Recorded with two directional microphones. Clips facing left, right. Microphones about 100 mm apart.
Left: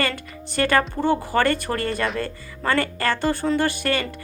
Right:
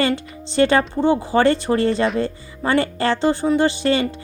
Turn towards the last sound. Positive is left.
turn(degrees=-25)  # may be behind; listen again after turning